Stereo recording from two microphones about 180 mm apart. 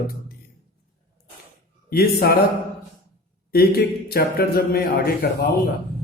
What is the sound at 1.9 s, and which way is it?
Speech, 60° left (ahead or behind).